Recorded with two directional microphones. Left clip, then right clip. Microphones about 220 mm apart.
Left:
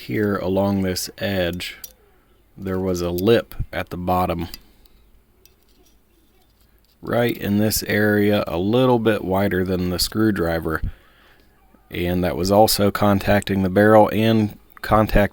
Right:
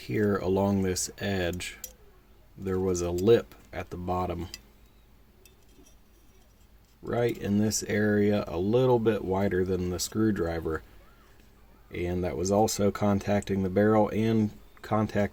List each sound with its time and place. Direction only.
0.0 s speech: 30° left (ahead or behind)
7.0 s speech: 35° left (ahead or behind)
11.9 s speech: 40° left (ahead or behind)